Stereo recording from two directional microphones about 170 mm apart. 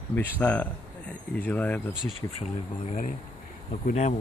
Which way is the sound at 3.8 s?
45° left (ahead or behind).